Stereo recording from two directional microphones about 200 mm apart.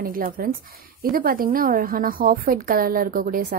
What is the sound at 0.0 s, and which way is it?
A woman's voice, 45° right (ahead or behind).